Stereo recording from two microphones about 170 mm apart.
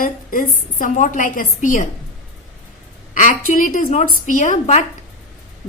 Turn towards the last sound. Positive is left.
turn(degrees=45)  # may be behind; listen again after turning